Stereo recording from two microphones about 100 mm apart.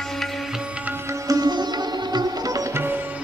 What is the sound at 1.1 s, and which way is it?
Sitar, 40° right (ahead or behind).